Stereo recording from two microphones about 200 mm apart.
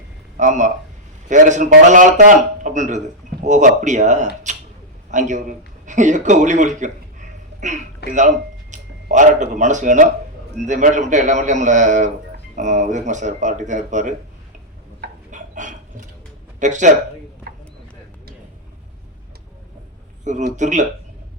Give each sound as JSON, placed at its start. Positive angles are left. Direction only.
{"t": 0.3, "sound": "a man's voice", "side_deg": -40}
{"t": 8.0, "sound": "speech", "side_deg": 55}
{"t": 8.7, "sound": "a man's voice", "side_deg": -40}
{"t": 15.0, "sound": "a sound", "side_deg": -40}
{"t": 16.6, "sound": "a man's voice", "side_deg": -35}
{"t": 20.2, "sound": "a man's voice", "side_deg": -35}